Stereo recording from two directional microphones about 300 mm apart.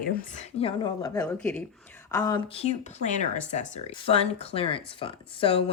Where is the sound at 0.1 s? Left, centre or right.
Left.